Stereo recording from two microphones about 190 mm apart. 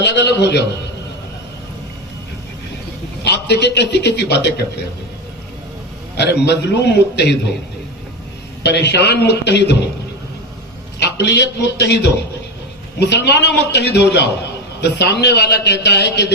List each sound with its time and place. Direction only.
0.0 s a man's voice: 65° left (ahead or behind)
3.2 s a man's voice: 65° left (ahead or behind)
6.1 s a man's voice: 65° left (ahead or behind)
8.6 s a man's voice: 60° left (ahead or behind)
11.0 s a man's voice: 60° left (ahead or behind)